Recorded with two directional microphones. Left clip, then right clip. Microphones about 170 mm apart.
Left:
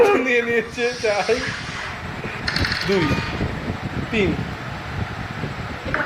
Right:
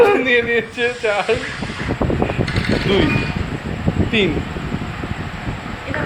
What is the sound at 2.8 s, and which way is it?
Speech, centre (ahead or behind).